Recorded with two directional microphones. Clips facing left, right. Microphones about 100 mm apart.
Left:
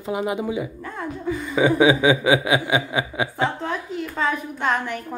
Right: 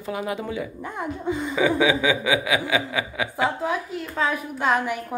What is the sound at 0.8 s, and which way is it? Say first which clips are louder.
Speech: even; 20° right (ahead or behind).